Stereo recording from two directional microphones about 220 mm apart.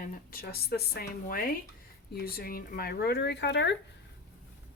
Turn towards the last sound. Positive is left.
turn(degrees=50)  # may be behind; listen again after turning